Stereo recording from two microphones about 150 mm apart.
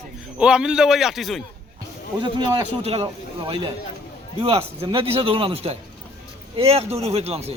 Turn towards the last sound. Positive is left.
turn(degrees=-45)  # may be behind; listen again after turning